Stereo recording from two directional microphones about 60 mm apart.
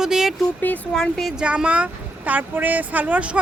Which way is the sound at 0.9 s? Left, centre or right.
Centre.